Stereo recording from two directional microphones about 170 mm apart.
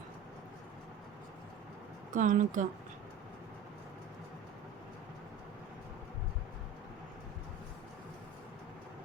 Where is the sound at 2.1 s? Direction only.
50° right (ahead or behind).